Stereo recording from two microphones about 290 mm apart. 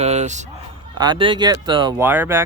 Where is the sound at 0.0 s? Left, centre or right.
Right.